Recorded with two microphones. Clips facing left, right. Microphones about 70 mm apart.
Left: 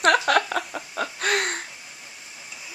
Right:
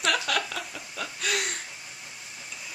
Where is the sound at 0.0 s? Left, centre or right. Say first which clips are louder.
Left 8 dB; left.